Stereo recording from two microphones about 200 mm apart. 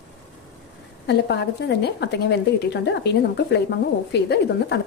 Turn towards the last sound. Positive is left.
turn(degrees=60)  # may be behind; listen again after turning